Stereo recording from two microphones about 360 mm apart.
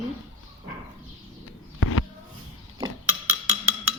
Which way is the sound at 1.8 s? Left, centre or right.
Left.